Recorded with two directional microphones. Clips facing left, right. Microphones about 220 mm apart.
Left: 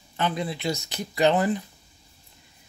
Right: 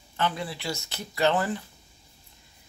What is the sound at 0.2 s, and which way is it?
Speech, 20° left (ahead or behind).